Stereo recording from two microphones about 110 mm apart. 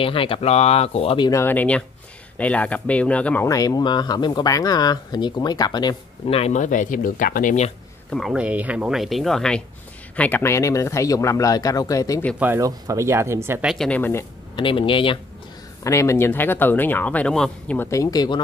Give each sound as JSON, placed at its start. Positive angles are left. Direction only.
{"t": 0.0, "sound": "speech", "side_deg": 55}
{"t": 1.3, "sound": "speech", "side_deg": 20}
{"t": 3.4, "sound": "speech", "side_deg": 35}
{"t": 6.2, "sound": "speech", "side_deg": 70}
{"t": 8.1, "sound": "speech", "side_deg": 0}
{"t": 10.1, "sound": "speech", "side_deg": 15}
{"t": 12.4, "sound": "speech", "side_deg": -20}
{"t": 12.6, "sound": "speech", "side_deg": -30}
{"t": 13.7, "sound": "speech", "side_deg": 10}
{"t": 14.5, "sound": "speech", "side_deg": 50}
{"t": 15.8, "sound": "speech", "side_deg": 25}
{"t": 17.7, "sound": "speech", "side_deg": 25}